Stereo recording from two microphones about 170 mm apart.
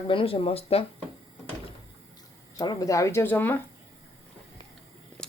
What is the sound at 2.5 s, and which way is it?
Speech, 25° left (ahead or behind).